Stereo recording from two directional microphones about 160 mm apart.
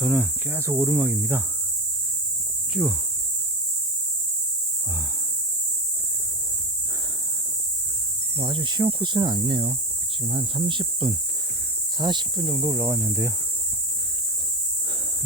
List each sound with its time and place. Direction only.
0.0 s speech: 10° right (ahead or behind)
8.4 s speech: 30° right (ahead or behind)